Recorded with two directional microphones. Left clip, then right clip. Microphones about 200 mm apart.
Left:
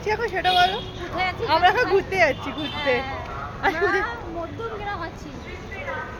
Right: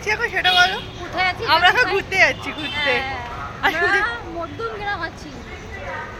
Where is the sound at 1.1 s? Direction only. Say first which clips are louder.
Right 4 dB; 10° right (ahead or behind).